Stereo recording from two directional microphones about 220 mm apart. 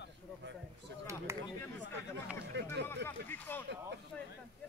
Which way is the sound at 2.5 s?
50° right (ahead or behind).